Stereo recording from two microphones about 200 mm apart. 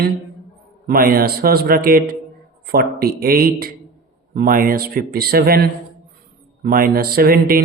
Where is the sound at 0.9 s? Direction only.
45° right (ahead or behind).